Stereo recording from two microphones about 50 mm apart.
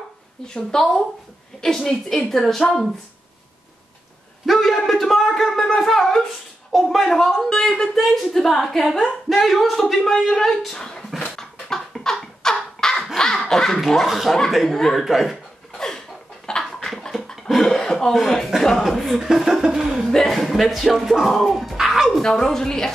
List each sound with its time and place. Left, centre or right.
0.5 s speech: centre
1.9 s speech: centre
4.5 s a sound: centre
6.7 s speech: centre
11.1 s a sound: centre
12.8 s dog: centre
13.7 s speech: centre
14.0 s speech: centre
16.5 s a sound: centre
18.6 s speech: centre
20.1 s speech: centre
21.8 s music: centre
22.1 s speech: centre